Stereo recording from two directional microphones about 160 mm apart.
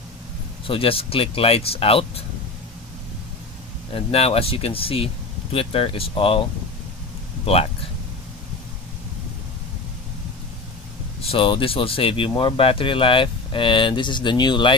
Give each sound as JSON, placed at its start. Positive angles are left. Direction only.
{"t": 0.7, "sound": "speech", "side_deg": 35}
{"t": 3.9, "sound": "speech", "side_deg": 40}
{"t": 7.4, "sound": "speech", "side_deg": 40}
{"t": 11.2, "sound": "speech", "side_deg": 30}